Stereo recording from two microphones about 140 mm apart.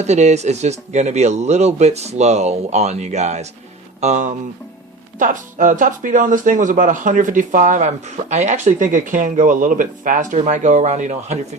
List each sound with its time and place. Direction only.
0.0 s speech: 55° right (ahead or behind)